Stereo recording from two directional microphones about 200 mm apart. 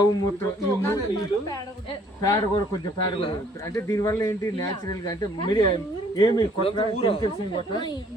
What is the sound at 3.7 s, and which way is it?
Speech, 15° left (ahead or behind).